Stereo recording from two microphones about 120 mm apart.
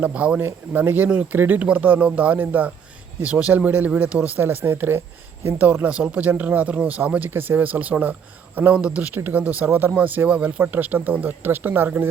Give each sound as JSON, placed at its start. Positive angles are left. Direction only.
{"t": 0.0, "sound": "speech", "side_deg": -10}